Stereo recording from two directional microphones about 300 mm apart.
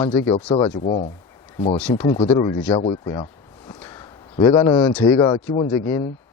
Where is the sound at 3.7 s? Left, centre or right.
Centre.